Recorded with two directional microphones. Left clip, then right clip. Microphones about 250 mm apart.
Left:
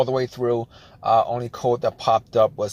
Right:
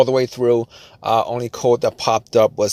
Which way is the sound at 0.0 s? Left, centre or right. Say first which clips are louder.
Right 6 dB; right.